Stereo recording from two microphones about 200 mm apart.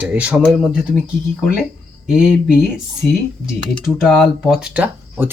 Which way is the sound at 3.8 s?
Centre (ahead or behind).